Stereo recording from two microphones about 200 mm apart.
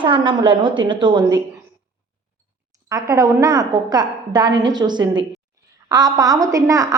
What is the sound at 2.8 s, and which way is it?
A woman's voice, 15° right (ahead or behind).